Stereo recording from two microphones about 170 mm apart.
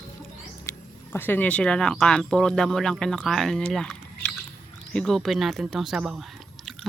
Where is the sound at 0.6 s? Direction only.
10° left (ahead or behind).